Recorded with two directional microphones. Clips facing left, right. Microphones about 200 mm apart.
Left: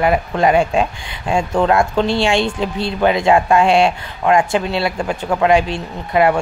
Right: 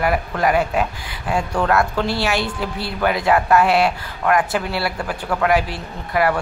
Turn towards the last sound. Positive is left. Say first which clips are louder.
# left 5 dB
turn(degrees=20)  # may be behind; listen again after turning